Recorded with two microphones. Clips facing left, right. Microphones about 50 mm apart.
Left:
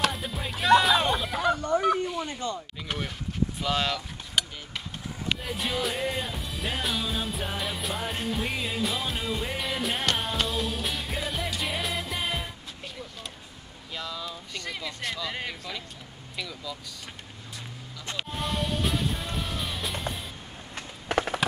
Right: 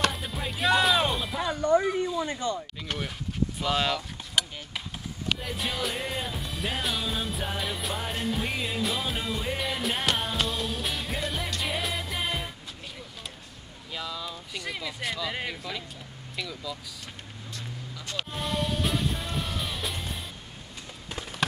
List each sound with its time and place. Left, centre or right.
0.0 s music: centre
1.8 s speech: left
2.9 s vehicle: centre
3.6 s vehicle: centre
5.4 s music: centre
13.9 s a sound: centre
16.3 s speech: centre
18.1 s music: centre
20.7 s a sound: left